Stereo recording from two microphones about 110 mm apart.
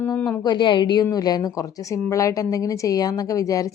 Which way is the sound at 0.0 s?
15° left (ahead or behind).